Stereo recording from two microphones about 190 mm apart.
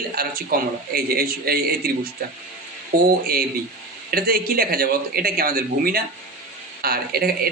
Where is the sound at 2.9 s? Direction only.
50° right (ahead or behind).